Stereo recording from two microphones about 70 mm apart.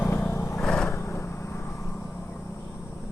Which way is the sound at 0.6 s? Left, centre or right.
Centre.